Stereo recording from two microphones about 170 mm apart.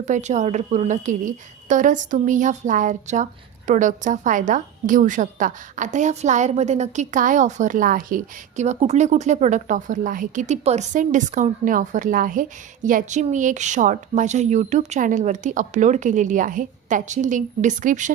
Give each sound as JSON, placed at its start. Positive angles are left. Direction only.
{"t": 0.0, "sound": "a woman's voice", "side_deg": -45}